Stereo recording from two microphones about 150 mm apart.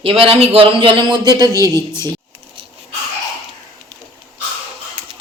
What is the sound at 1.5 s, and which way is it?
Speech, 20° left (ahead or behind).